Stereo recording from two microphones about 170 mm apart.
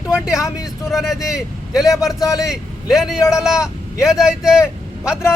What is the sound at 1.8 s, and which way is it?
Speech, 20° left (ahead or behind).